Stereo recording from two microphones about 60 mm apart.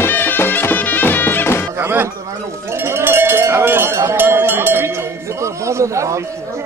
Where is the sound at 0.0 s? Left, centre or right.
Left.